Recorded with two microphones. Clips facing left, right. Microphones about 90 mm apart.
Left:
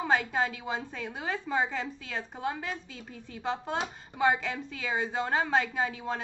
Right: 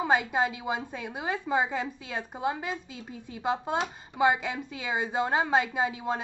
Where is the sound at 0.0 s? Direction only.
15° right (ahead or behind).